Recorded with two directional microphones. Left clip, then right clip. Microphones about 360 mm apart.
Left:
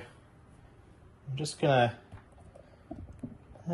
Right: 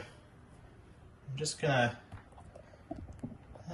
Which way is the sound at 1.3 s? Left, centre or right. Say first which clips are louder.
Left 5 dB; centre.